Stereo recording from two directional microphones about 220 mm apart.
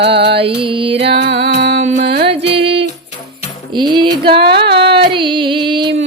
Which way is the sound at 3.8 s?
20° right (ahead or behind).